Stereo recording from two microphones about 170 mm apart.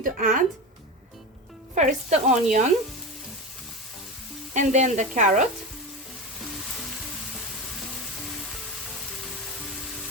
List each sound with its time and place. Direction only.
0.0 s speech: 55° right (ahead or behind)
1.7 s speech: 45° right (ahead or behind)
4.5 s speech: 45° right (ahead or behind)